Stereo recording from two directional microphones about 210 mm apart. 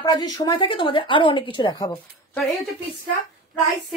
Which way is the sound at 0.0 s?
20° left (ahead or behind).